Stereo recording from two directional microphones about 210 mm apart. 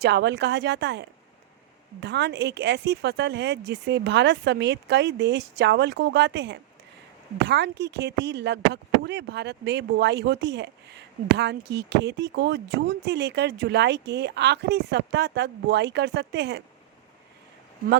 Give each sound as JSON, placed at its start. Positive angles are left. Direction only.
{"t": 0.0, "sound": "speech", "side_deg": -55}